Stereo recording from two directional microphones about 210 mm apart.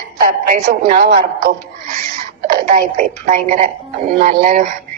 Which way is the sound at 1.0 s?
40° right (ahead or behind).